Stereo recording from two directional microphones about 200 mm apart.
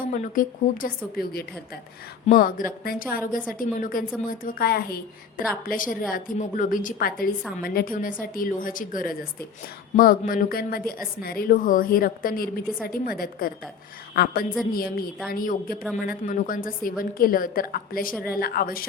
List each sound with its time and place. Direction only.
0.1 s a woman's voice: 40° left (ahead or behind)